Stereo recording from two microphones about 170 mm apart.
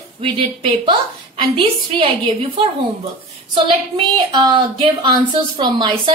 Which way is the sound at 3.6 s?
30° right (ahead or behind).